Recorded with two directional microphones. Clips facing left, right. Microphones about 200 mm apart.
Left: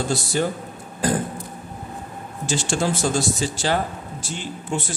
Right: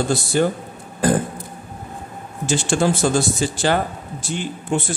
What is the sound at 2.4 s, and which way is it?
A man's voice, 55° right (ahead or behind).